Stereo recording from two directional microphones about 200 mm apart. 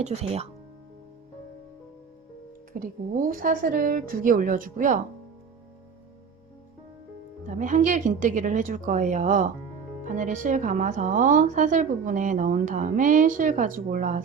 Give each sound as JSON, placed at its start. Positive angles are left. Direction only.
{"t": 0.0, "sound": "speech", "side_deg": -30}
{"t": 2.7, "sound": "a woman's voice", "side_deg": -45}
{"t": 7.4, "sound": "speech", "side_deg": -40}